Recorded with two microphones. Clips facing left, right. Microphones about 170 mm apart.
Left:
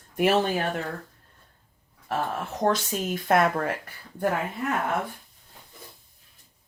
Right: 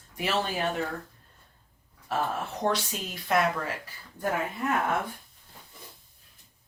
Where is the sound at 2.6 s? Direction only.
50° left (ahead or behind).